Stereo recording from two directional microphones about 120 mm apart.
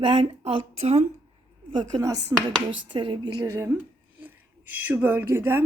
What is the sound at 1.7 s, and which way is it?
Speech, 35° right (ahead or behind).